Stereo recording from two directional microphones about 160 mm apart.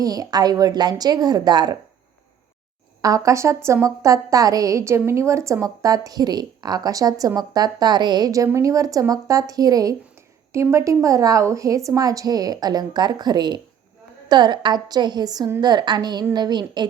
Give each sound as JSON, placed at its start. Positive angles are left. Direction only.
{"t": 0.0, "sound": "a woman's voice", "side_deg": -25}
{"t": 3.0, "sound": "a woman's voice", "side_deg": -20}